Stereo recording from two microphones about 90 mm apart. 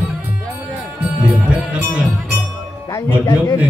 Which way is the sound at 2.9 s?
45° left (ahead or behind).